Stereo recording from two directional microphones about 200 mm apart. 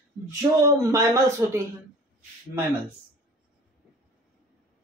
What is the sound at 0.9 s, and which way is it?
Speech, 15° right (ahead or behind).